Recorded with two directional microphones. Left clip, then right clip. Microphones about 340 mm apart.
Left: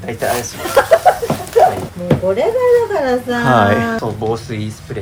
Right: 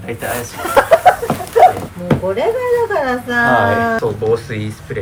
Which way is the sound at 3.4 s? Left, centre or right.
Left.